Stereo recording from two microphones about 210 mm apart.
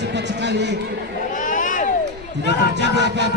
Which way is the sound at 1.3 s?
40° left (ahead or behind).